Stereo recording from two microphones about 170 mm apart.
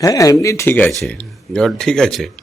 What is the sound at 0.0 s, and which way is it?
Speech, 20° left (ahead or behind).